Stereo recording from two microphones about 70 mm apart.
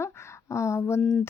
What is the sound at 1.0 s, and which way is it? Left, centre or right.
Mantra, centre.